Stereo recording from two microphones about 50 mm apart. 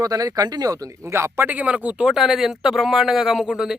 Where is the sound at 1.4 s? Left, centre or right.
Right.